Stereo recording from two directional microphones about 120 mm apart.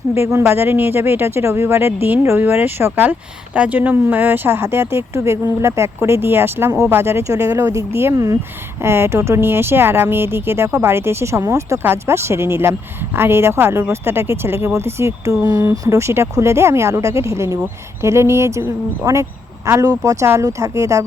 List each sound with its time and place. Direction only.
0.1 s speech: 20° right (ahead or behind)